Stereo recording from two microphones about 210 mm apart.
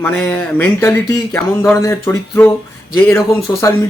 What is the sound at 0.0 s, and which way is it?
Speech, 10° left (ahead or behind).